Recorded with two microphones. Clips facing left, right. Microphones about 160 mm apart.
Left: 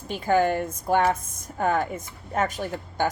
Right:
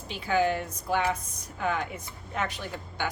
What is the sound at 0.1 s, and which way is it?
A woman's voice, 50° left (ahead or behind).